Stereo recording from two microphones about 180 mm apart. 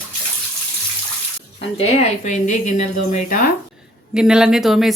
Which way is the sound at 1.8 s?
40° left (ahead or behind).